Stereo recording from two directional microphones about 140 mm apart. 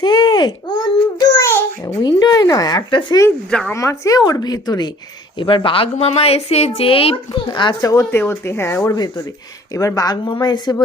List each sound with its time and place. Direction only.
0.0 s baby cry: 35° left (ahead or behind)
1.2 s babbling: 25° left (ahead or behind)
3.2 s speech: 5° left (ahead or behind)
3.7 s a woman's voice: 20° left (ahead or behind)